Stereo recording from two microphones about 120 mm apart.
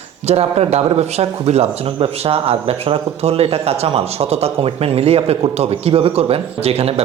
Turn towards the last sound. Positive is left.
turn(degrees=-55)  # may be behind; listen again after turning